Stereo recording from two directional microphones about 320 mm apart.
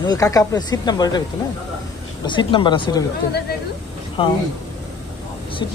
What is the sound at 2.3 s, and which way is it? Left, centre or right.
Speech, centre.